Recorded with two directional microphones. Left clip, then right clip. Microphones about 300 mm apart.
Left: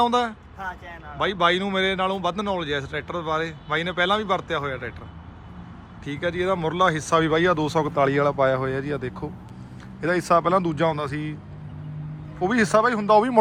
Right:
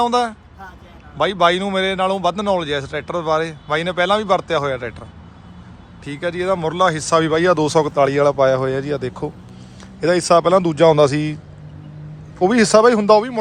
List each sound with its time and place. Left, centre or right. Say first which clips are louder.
0.0 s speech: right 4 dB; centre
6.1 s speech: right 4 dB; centre
12.4 s speech: right 7 dB; centre